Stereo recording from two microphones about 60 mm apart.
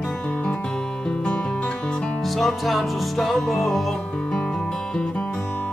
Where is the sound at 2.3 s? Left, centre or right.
Centre.